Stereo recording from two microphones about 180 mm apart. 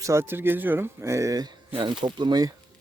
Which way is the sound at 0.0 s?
15° right (ahead or behind).